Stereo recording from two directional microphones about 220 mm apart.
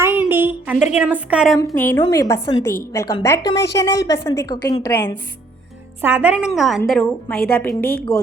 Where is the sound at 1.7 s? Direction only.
10° left (ahead or behind).